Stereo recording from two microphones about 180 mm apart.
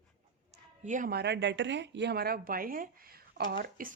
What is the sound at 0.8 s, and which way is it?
Speech, 45° right (ahead or behind).